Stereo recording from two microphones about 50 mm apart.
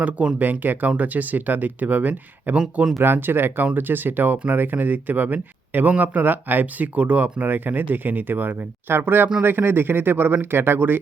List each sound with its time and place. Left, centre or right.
0.0 s speech: right
3.0 s speech: right